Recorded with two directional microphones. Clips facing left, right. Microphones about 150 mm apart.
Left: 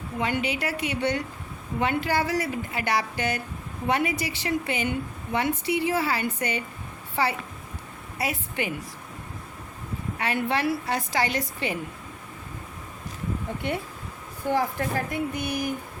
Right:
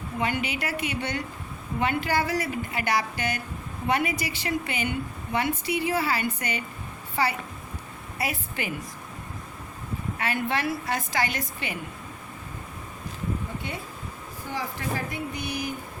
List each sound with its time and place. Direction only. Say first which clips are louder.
0.2 s a woman's voice: left 2 dB; 25° left (ahead or behind)
8.2 s a woman's voice: left 2 dB; 25° left (ahead or behind)
10.2 s a woman's voice: left 2 dB; 30° left (ahead or behind)
14.5 s speech: left 6 dB; 50° left (ahead or behind)